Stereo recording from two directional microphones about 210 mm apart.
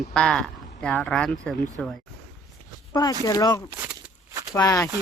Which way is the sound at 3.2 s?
15° left (ahead or behind).